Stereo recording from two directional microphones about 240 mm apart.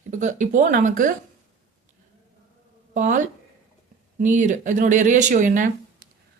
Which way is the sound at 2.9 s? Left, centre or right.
Right.